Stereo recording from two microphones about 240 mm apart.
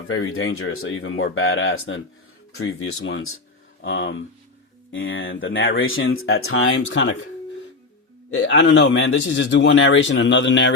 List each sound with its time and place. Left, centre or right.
0.1 s speech: left
8.3 s speech: left